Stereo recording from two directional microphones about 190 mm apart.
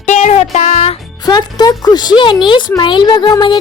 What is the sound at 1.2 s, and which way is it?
A child's voice, 20° left (ahead or behind).